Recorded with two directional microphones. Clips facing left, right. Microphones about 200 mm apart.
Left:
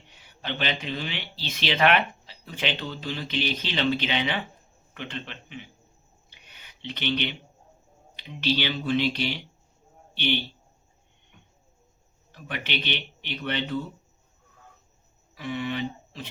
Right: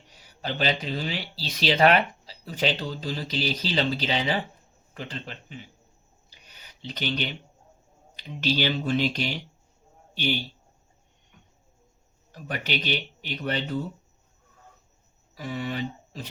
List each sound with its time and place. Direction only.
0.1 s speech: 40° right (ahead or behind)
6.3 s a sound: 40° right (ahead or behind)
8.1 s speech: 45° right (ahead or behind)
12.3 s speech: 40° right (ahead or behind)
15.4 s speech: 40° right (ahead or behind)